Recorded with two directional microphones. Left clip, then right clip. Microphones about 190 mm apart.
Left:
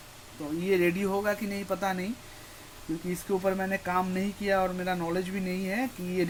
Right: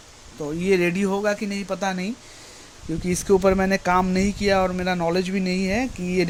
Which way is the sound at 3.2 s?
55° right (ahead or behind).